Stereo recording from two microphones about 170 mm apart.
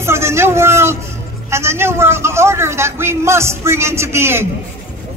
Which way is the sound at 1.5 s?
15° right (ahead or behind).